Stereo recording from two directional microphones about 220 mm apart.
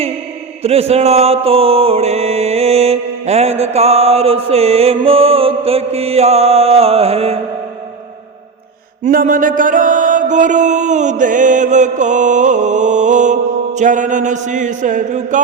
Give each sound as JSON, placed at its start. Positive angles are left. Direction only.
{"t": 0.6, "sound": "mantra", "side_deg": -30}
{"t": 9.0, "sound": "mantra", "side_deg": -35}